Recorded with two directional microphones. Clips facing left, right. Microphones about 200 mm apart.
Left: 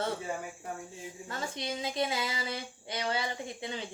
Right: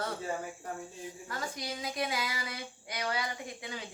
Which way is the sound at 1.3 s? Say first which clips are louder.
Left 3 dB; 25° left (ahead or behind).